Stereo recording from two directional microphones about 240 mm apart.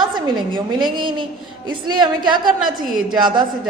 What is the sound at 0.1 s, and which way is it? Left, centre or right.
A woman's voice, centre.